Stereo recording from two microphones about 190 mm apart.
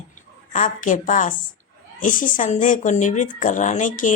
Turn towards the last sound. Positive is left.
turn(degrees=40)  # may be behind; listen again after turning